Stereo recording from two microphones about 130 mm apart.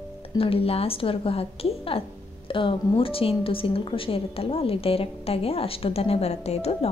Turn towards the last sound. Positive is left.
turn(degrees=50)  # may be behind; listen again after turning